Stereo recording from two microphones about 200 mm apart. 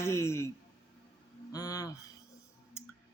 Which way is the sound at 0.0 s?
15° left (ahead or behind).